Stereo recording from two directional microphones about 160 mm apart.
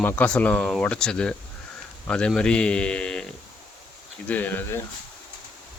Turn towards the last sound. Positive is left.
turn(degrees=10)  # may be behind; listen again after turning